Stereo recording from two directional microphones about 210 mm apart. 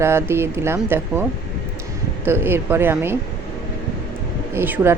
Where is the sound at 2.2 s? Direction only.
10° right (ahead or behind).